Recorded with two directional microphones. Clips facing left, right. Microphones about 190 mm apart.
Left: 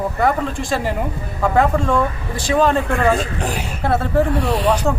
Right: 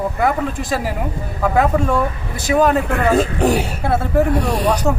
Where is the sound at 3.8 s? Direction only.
10° right (ahead or behind).